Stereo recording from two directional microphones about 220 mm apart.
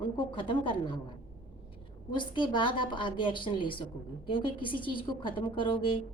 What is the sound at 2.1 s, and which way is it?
A woman's voice, 20° left (ahead or behind).